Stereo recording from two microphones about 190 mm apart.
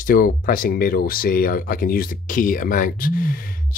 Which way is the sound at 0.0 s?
50° left (ahead or behind).